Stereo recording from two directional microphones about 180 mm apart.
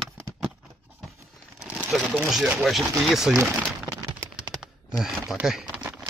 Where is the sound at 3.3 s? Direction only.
10° right (ahead or behind).